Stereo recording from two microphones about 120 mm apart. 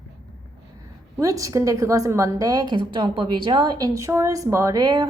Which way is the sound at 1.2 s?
30° right (ahead or behind).